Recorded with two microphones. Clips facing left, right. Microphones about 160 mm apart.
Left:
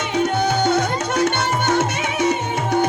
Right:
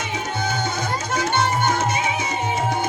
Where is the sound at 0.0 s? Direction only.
70° left (ahead or behind).